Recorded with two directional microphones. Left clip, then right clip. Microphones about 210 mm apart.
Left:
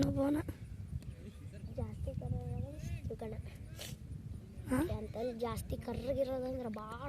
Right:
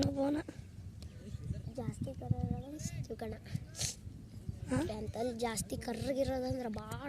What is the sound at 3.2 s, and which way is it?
Speech, 30° right (ahead or behind).